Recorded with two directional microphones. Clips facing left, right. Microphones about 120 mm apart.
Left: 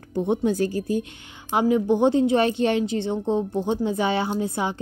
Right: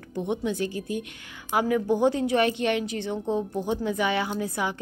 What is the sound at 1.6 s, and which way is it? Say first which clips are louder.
A woman's voice: left 4 dB; 20° left (ahead or behind).